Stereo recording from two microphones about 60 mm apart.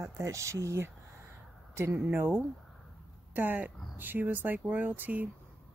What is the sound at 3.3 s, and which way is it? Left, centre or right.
Speech, right.